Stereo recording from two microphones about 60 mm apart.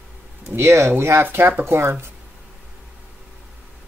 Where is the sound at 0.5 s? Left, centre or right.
Right.